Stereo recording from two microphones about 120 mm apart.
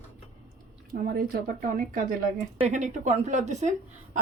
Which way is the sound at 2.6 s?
75° right (ahead or behind).